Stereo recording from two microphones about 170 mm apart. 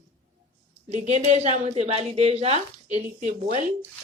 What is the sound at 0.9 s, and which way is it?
A woman's voice, 40° right (ahead or behind).